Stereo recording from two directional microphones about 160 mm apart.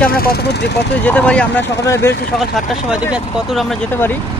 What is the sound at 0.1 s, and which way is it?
Speech, 70° left (ahead or behind).